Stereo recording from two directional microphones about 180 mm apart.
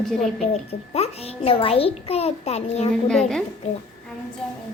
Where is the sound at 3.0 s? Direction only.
Centre (ahead or behind).